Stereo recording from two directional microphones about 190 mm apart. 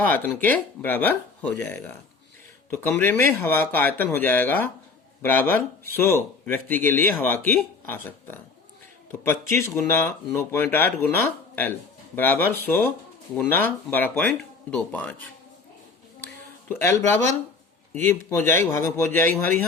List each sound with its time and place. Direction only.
0.0 s speech: 10° left (ahead or behind)
9.6 s speech: 15° left (ahead or behind)
16.2 s a sound: 10° left (ahead or behind)
18.0 s speech: 15° left (ahead or behind)